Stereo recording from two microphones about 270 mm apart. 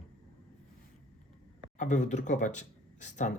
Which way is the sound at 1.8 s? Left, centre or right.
Left.